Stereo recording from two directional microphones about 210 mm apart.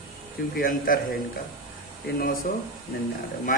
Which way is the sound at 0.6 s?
40° left (ahead or behind).